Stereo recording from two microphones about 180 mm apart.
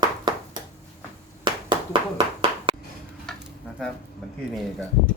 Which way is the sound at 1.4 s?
25° right (ahead or behind).